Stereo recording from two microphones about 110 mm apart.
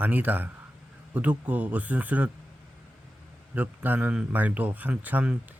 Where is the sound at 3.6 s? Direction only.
15° right (ahead or behind).